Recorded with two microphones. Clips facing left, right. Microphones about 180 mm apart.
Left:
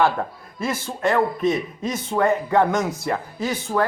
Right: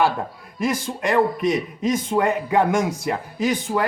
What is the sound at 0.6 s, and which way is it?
A man's voice, 15° right (ahead or behind).